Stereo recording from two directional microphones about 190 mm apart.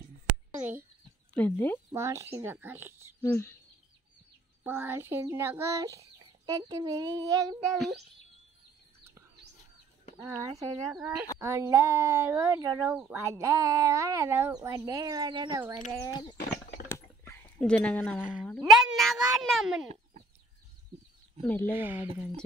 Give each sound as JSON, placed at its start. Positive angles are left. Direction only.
{"t": 0.3, "sound": "a sound", "side_deg": -10}
{"t": 1.3, "sound": "speech", "side_deg": 10}
{"t": 1.9, "sound": "a child's voice", "side_deg": -15}
{"t": 3.2, "sound": "speech", "side_deg": 15}
{"t": 4.6, "sound": "a child's voice", "side_deg": -10}
{"t": 7.7, "sound": "speech", "side_deg": 0}
{"t": 10.1, "sound": "a child's voice", "side_deg": -15}
{"t": 12.9, "sound": "a child's voice", "side_deg": -10}
{"t": 16.0, "sound": "speech", "side_deg": 20}
{"t": 16.9, "sound": "dog", "side_deg": 10}
{"t": 18.2, "sound": "speech", "side_deg": -5}
{"t": 21.4, "sound": "speech", "side_deg": 10}
{"t": 21.6, "sound": "a child's voice", "side_deg": -10}